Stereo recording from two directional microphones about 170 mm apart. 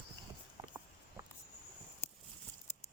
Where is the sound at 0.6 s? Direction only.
30° right (ahead or behind).